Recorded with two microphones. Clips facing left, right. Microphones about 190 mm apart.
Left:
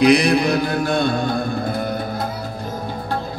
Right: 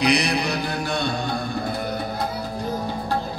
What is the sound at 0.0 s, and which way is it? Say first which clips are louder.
Music: left 7 dB; 50° left (ahead or behind).